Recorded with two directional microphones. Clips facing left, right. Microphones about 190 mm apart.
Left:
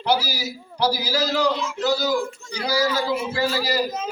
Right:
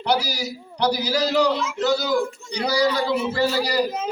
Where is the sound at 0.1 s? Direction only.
5° left (ahead or behind).